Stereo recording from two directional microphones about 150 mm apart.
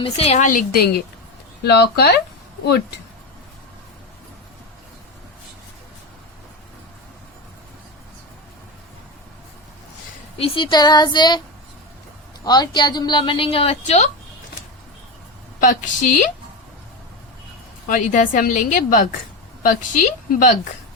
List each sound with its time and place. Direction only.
0.0 s a woman's voice: 40° left (ahead or behind)
0.4 s a woman's voice: 75° left (ahead or behind)
10.3 s speech: 40° left (ahead or behind)
12.5 s a woman's voice: 30° left (ahead or behind); by 14.1 s 50° left (ahead or behind)
15.6 s a woman's voice: 55° left (ahead or behind)
17.8 s a woman's voice: 60° left (ahead or behind)